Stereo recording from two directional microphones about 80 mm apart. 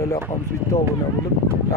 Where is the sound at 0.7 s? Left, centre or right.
Left.